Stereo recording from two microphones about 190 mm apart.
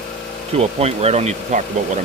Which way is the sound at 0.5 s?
35° right (ahead or behind).